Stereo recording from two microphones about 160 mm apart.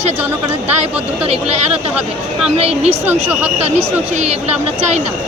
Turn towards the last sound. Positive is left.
turn(degrees=-45)  # may be behind; listen again after turning